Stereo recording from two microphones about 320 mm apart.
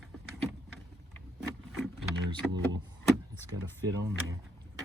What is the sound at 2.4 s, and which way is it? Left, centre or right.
Speech, centre.